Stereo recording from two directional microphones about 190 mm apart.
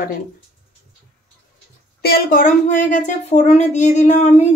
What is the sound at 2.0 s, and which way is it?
A woman's voice, 55° left (ahead or behind).